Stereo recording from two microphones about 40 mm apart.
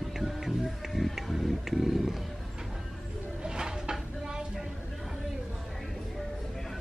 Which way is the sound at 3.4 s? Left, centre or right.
Centre.